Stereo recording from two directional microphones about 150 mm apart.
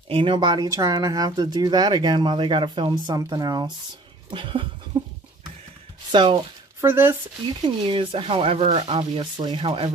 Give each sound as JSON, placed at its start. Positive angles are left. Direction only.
{"t": 0.1, "sound": "speech", "side_deg": -35}
{"t": 6.1, "sound": "speech", "side_deg": -30}
{"t": 6.8, "sound": "speech", "side_deg": -15}
{"t": 7.6, "sound": "speech", "side_deg": -35}